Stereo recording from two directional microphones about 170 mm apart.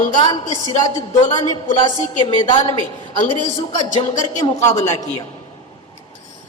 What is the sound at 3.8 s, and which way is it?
Speech, 25° left (ahead or behind).